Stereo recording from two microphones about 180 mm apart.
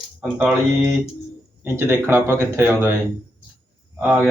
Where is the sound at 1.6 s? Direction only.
15° right (ahead or behind).